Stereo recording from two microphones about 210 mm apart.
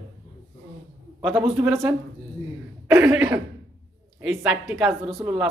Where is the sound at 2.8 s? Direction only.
10° right (ahead or behind).